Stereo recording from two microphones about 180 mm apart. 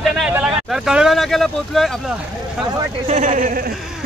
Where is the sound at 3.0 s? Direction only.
45° right (ahead or behind).